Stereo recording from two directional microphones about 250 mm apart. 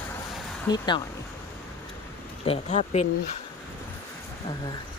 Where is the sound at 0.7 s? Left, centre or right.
Centre.